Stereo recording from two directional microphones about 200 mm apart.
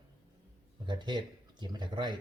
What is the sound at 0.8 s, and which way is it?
Speech, 25° right (ahead or behind).